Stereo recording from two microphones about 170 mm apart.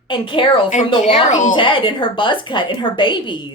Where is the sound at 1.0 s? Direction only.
45° left (ahead or behind).